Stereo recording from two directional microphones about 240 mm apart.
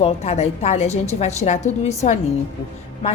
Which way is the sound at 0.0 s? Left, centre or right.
Left.